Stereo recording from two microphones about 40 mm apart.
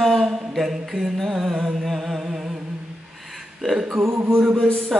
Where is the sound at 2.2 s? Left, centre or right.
Centre.